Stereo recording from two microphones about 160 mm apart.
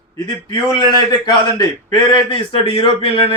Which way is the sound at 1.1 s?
25° left (ahead or behind).